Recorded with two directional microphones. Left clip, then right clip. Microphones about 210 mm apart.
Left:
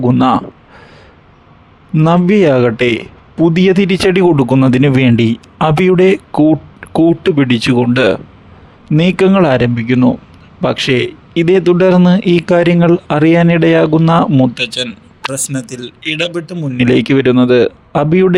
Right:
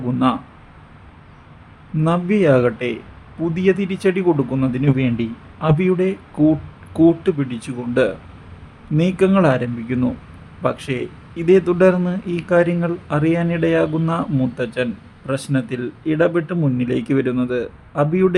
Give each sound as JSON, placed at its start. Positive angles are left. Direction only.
{"t": 0.0, "sound": "speech", "side_deg": 45}
{"t": 2.0, "sound": "speech", "side_deg": 45}
{"t": 15.5, "sound": "a man's voice", "side_deg": 0}
{"t": 16.7, "sound": "speech", "side_deg": 45}